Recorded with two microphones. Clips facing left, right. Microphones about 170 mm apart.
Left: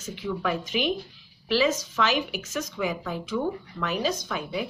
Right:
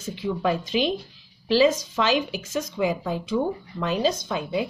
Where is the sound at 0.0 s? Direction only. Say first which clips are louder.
Right 4 dB; 30° right (ahead or behind).